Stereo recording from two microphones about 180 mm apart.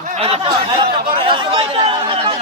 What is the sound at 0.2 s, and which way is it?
Chatter, 30° right (ahead or behind).